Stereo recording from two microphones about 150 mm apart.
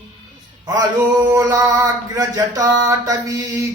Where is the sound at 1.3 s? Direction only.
20° right (ahead or behind).